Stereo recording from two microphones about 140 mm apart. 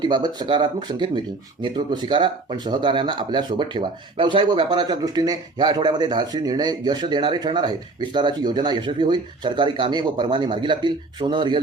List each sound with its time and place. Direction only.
0.0 s speech: 30° right (ahead or behind)